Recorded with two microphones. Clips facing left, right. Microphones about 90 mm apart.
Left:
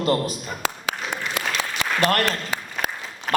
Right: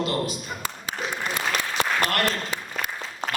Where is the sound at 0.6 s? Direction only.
90° left.